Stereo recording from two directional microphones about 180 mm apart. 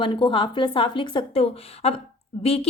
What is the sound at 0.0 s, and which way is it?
A woman's voice, 25° left (ahead or behind).